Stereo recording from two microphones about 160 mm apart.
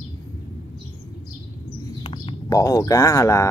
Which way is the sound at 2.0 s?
30° left (ahead or behind).